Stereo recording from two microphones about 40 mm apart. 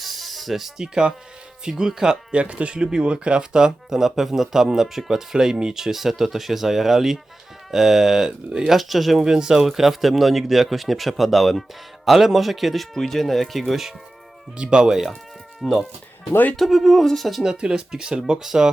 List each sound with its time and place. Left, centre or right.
0.0 s music: centre
1.6 s speech: centre
2.3 s speech: right; by 9.2 s centre
9.2 s speech: centre
14.6 s speech: right
15.6 s speech: centre
17.4 s speech: centre